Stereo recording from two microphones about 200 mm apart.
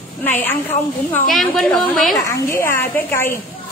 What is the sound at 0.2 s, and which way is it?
A woman's voice, 10° left (ahead or behind).